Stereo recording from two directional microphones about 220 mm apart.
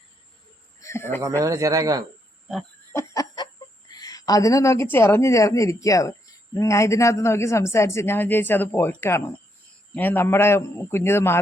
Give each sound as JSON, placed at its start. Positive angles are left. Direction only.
{"t": 0.8, "sound": "speech", "side_deg": 10}
{"t": 1.4, "sound": "speech", "side_deg": -15}
{"t": 2.9, "sound": "a man's voice", "side_deg": 15}